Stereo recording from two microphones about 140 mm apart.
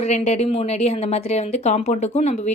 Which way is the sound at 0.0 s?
50° left (ahead or behind).